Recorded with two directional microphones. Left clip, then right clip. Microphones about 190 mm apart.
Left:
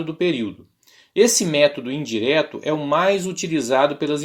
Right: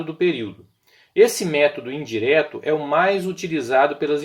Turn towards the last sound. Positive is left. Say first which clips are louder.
# right 1 dB
turn(degrees=35)  # may be behind; listen again after turning